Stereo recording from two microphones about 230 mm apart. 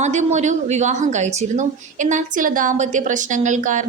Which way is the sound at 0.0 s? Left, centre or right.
Right.